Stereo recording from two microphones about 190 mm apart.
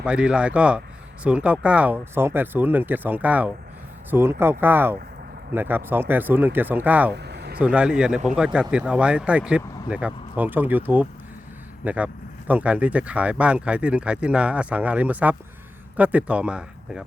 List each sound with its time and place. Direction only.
0.0 s speech: 5° right (ahead or behind)
7.1 s vehicle: 60° right (ahead or behind)
7.6 s speech: 5° right (ahead or behind)